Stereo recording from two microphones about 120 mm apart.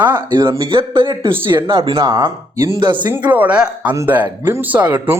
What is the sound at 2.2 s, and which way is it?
Speech, 30° right (ahead or behind).